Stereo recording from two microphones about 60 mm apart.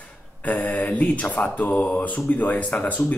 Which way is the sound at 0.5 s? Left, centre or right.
Left.